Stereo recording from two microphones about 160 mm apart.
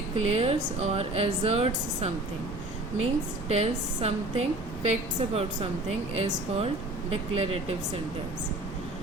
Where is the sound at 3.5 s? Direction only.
40° right (ahead or behind).